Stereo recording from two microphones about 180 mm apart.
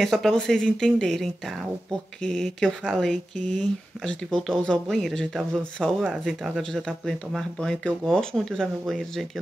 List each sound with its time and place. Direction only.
0.0 s speech: centre (ahead or behind)